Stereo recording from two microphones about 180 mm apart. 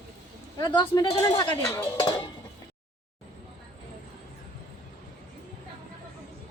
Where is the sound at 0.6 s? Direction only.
25° left (ahead or behind).